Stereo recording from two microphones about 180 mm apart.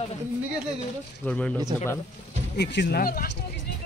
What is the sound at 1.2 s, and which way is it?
Speech, 5° left (ahead or behind).